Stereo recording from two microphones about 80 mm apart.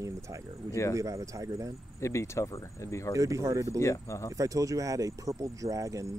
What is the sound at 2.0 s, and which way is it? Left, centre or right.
Speech, left.